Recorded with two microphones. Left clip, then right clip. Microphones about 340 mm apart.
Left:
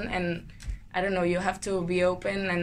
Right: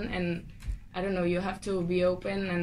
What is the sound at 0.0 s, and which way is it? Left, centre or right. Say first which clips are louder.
Speech: left 3 dB; left.